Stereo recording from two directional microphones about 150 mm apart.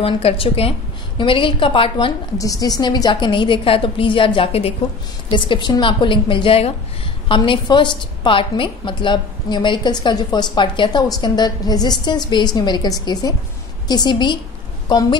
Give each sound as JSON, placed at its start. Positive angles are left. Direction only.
{"t": 0.0, "sound": "a woman's voice", "side_deg": 40}
{"t": 2.3, "sound": "a woman's voice", "side_deg": 25}